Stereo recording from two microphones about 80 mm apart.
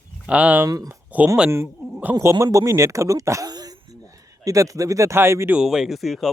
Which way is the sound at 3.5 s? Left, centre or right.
Right.